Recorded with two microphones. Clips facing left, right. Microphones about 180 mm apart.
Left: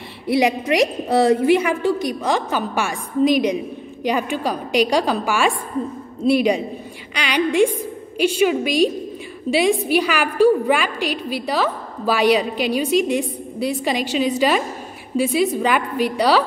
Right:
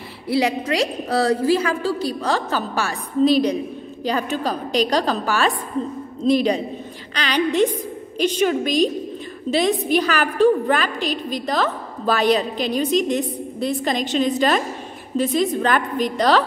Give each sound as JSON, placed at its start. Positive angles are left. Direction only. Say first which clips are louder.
{"t": 0.3, "sound": "a woman's voice", "louder": "left 2 dB", "side_deg": 20}